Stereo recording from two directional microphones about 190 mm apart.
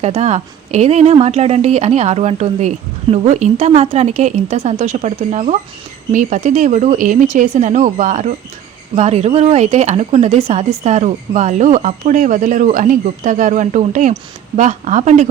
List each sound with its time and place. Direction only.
0.0 s speech: 35° right (ahead or behind)